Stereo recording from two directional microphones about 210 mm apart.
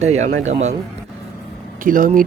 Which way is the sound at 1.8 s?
40° right (ahead or behind).